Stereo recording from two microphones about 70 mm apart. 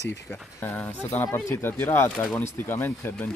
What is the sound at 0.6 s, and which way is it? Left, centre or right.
Speech, left.